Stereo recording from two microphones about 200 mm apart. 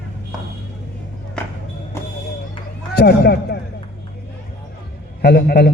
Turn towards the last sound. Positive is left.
turn(degrees=50)  # may be behind; listen again after turning